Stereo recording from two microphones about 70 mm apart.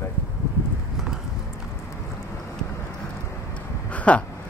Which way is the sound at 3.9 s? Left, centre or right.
Centre.